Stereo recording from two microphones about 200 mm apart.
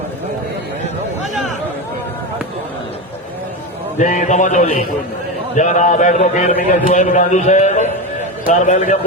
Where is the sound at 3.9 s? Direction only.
40° left (ahead or behind).